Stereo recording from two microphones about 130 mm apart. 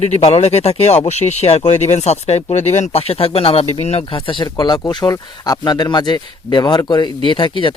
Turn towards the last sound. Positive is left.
turn(degrees=40)  # may be behind; listen again after turning